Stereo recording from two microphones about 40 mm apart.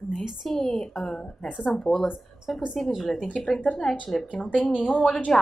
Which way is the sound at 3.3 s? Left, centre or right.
Left.